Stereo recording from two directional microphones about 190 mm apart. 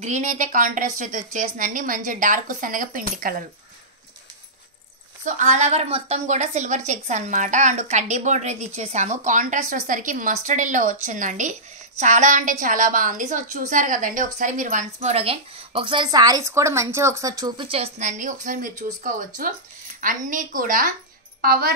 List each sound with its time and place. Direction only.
0.0 s a woman's voice: 40° right (ahead or behind)
5.2 s a woman's voice: 40° right (ahead or behind)